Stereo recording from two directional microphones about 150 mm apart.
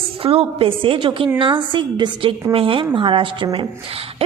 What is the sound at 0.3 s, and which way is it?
A woman's voice, 40° right (ahead or behind).